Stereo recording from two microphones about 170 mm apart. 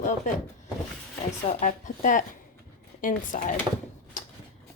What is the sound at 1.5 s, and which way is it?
Speech, 45° left (ahead or behind).